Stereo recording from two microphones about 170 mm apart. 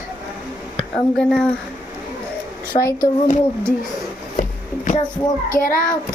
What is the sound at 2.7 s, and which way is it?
Speech, 35° left (ahead or behind).